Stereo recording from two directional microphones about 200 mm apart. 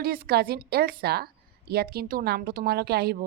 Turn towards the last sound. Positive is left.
turn(degrees=-50)  # may be behind; listen again after turning